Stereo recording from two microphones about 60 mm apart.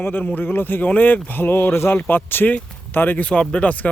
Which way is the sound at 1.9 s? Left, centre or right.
Left.